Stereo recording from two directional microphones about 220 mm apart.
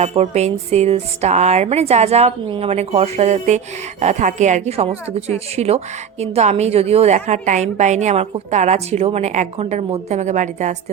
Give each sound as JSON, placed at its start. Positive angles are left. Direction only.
{"t": 0.0, "sound": "a woman's voice", "side_deg": -30}